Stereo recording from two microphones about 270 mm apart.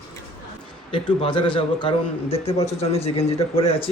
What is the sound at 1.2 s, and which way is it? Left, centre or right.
A man's voice, centre.